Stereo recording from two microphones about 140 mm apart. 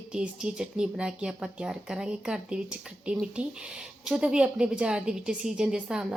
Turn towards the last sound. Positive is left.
turn(degrees=-5)  # may be behind; listen again after turning